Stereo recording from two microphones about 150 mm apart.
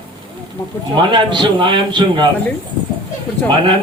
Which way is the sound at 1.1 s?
30° right (ahead or behind).